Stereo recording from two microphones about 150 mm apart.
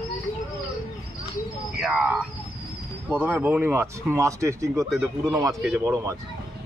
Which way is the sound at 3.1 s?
10° right (ahead or behind).